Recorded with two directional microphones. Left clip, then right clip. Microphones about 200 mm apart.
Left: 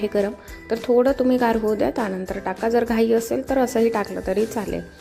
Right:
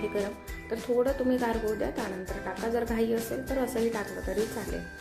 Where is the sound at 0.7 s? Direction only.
40° left (ahead or behind).